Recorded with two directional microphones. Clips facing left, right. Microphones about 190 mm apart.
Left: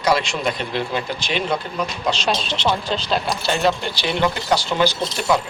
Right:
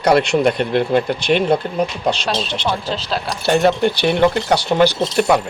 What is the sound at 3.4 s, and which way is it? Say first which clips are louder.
Speech: right 11 dB; 55° right (ahead or behind).